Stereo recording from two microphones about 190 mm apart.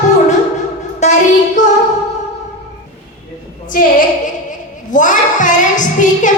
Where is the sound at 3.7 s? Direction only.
45° left (ahead or behind).